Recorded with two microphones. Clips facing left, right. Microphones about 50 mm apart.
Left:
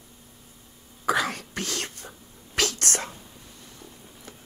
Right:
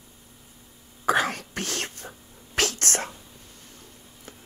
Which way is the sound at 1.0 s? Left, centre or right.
Right.